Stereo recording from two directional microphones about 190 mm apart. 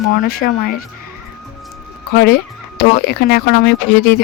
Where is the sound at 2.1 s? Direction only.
55° left (ahead or behind).